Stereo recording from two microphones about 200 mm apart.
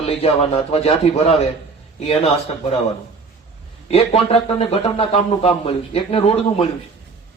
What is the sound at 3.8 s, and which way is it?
A man's voice, 30° left (ahead or behind).